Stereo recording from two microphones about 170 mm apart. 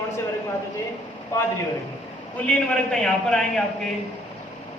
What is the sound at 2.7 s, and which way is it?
Speech, 5° left (ahead or behind).